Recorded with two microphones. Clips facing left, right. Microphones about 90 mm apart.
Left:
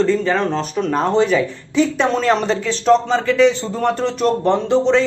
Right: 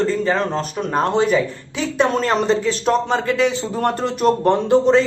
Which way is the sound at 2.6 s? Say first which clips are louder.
Left 3 dB; 45° right (ahead or behind).